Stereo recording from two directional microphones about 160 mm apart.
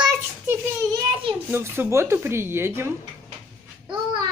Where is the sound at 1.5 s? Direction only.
15° right (ahead or behind).